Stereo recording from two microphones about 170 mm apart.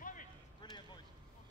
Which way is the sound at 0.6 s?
25° left (ahead or behind).